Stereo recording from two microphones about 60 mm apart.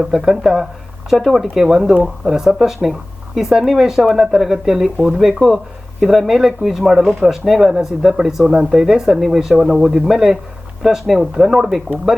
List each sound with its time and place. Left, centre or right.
0.0 s speech: centre
4.9 s speech: centre
5.2 s speech: centre